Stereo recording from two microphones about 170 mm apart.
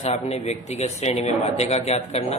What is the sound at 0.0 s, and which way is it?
Speech, 40° left (ahead or behind).